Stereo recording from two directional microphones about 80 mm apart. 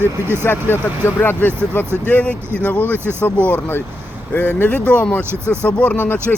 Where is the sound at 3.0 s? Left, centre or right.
Right.